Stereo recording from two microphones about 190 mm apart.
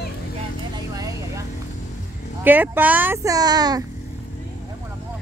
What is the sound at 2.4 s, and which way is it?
A woman's voice, 10° right (ahead or behind).